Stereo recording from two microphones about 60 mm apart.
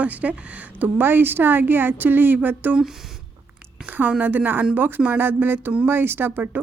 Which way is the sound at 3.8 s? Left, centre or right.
Right.